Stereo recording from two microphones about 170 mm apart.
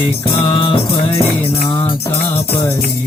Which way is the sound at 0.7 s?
35° left (ahead or behind).